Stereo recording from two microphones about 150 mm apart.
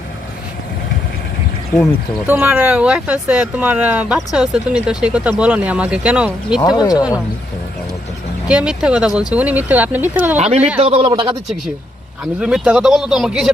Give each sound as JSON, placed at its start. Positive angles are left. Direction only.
{"t": 2.2, "sound": "speech", "side_deg": -10}
{"t": 6.6, "sound": "speech", "side_deg": 25}
{"t": 8.4, "sound": "speech", "side_deg": -5}
{"t": 10.3, "sound": "speech", "side_deg": -45}
{"t": 12.2, "sound": "speech", "side_deg": -5}